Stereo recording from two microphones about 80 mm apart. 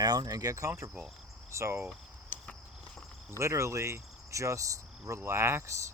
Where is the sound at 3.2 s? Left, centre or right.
Right.